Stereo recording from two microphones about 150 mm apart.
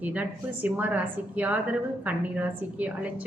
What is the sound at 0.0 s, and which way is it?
A woman's voice, 10° right (ahead or behind).